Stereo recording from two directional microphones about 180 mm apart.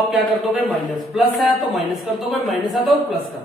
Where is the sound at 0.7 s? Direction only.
Centre (ahead or behind).